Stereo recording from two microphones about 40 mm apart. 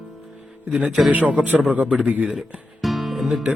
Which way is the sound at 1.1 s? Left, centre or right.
Right.